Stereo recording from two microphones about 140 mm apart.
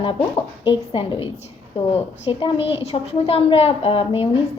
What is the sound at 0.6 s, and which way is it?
A woman's voice, 40° left (ahead or behind).